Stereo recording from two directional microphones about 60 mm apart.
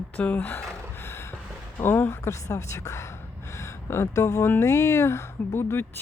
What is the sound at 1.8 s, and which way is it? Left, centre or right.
A woman's voice, left.